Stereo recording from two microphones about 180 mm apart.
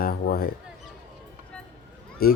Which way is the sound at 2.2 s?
55° left (ahead or behind).